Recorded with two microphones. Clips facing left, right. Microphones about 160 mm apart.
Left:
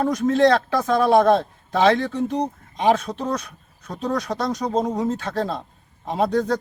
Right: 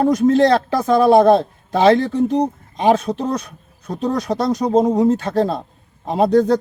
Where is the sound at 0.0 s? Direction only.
30° right (ahead or behind).